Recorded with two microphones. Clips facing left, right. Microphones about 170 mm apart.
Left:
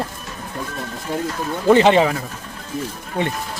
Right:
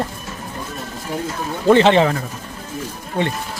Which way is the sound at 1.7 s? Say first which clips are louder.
Even; 15° left (ahead or behind).